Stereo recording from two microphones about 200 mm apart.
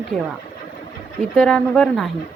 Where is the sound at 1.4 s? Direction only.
5° left (ahead or behind).